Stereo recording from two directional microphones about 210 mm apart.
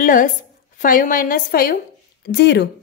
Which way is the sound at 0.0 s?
40° left (ahead or behind).